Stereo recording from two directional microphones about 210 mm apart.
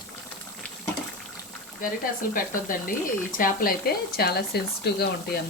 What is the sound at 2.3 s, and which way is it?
Speech, 40° left (ahead or behind).